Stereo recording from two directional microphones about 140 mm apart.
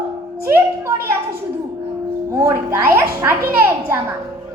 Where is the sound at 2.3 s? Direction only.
20° right (ahead or behind).